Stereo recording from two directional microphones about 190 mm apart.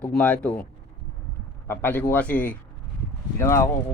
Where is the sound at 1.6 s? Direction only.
10° left (ahead or behind).